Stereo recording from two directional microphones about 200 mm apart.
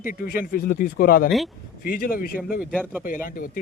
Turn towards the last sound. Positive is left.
turn(degrees=45)  # may be behind; listen again after turning